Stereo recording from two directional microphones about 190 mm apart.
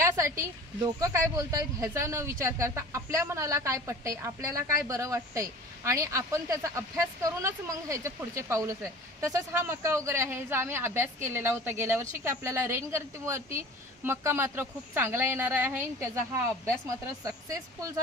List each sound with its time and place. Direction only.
0.0 s speech: 15° right (ahead or behind)